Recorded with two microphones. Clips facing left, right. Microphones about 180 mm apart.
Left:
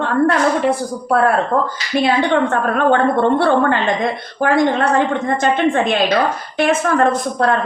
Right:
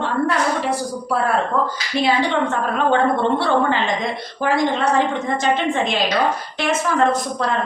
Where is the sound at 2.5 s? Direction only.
55° left (ahead or behind).